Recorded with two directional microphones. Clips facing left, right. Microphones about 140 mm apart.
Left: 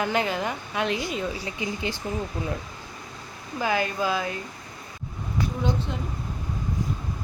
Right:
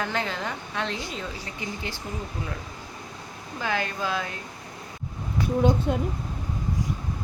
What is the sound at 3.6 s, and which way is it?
Speech, 10° left (ahead or behind).